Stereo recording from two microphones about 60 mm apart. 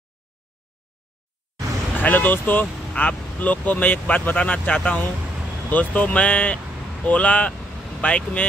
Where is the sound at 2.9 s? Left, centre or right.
Left.